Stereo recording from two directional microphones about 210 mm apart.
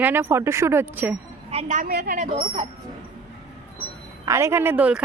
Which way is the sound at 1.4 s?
30° right (ahead or behind).